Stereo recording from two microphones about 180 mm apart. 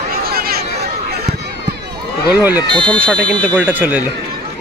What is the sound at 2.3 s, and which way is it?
Speech, 10° right (ahead or behind).